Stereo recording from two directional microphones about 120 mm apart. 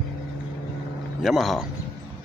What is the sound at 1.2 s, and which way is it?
Speech, centre (ahead or behind).